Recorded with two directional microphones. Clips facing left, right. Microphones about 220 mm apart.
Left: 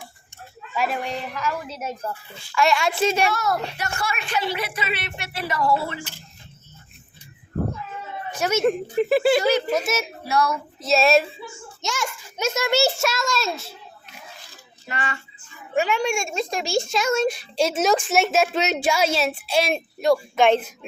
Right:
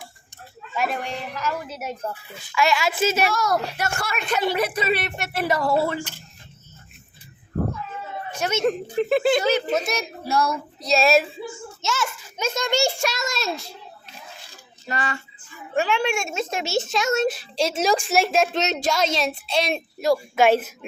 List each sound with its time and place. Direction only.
0.8 s a child's voice: centre (ahead or behind)
1.7 s speech: 10° right (ahead or behind)
2.6 s a child's voice: centre (ahead or behind)
3.3 s a woman's voice: 40° right (ahead or behind)
4.7 s speech: 40° right (ahead or behind)
8.4 s a child's voice: 10° left (ahead or behind)
11.8 s a child's voice: 15° left (ahead or behind)
14.8 s speech: 40° right (ahead or behind)
15.7 s a child's voice: centre (ahead or behind)